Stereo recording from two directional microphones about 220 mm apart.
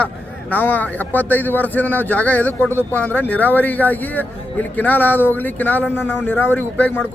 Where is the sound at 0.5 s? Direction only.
5° left (ahead or behind).